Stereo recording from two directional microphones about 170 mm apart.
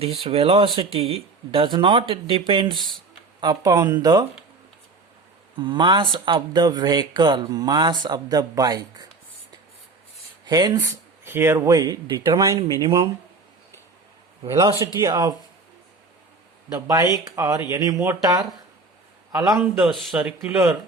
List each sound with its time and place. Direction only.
0.0 s speech: 35° right (ahead or behind)
2.7 s speech: centre (ahead or behind)
3.4 s speech: 20° right (ahead or behind)
5.5 s speech: 25° right (ahead or behind)
10.4 s speech: 25° right (ahead or behind)
14.4 s speech: 20° right (ahead or behind)
16.7 s speech: 20° right (ahead or behind)
19.5 s speech: 5° right (ahead or behind)